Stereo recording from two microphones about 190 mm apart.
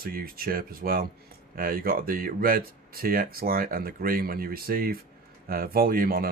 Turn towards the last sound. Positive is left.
turn(degrees=-50)  # may be behind; listen again after turning